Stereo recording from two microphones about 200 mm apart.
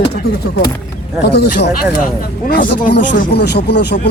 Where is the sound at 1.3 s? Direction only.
50° left (ahead or behind).